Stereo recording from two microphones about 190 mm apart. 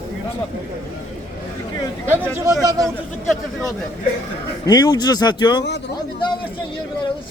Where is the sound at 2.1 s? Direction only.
15° right (ahead or behind).